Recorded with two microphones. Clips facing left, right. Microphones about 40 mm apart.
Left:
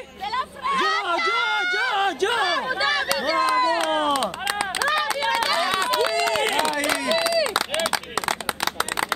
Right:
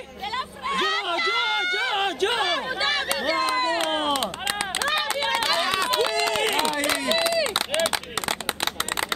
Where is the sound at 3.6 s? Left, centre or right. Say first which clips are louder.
Left 3 dB; right.